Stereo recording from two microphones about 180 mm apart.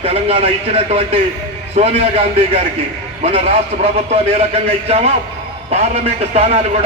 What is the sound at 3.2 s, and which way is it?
A man's voice, 35° right (ahead or behind).